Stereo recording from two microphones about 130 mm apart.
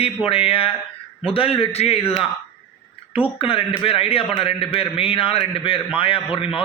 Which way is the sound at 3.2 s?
45° left (ahead or behind).